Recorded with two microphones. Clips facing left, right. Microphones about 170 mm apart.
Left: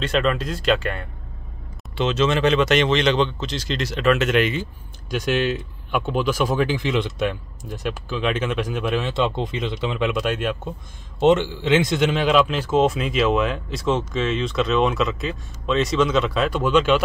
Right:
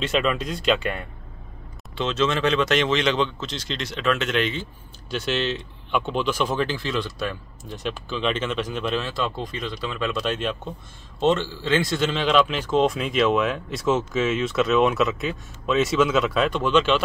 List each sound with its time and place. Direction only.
0.0 s speech: 5° right (ahead or behind)
9.1 s speech: 25° left (ahead or behind)